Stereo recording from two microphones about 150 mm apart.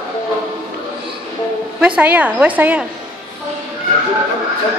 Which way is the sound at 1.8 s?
10° right (ahead or behind).